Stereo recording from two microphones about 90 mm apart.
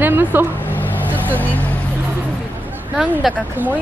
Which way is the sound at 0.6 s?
20° left (ahead or behind).